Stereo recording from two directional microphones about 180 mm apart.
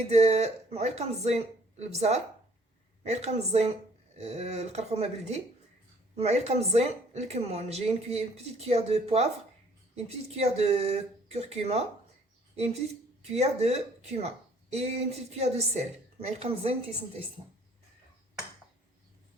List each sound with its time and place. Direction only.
0.1 s speech: 35° right (ahead or behind)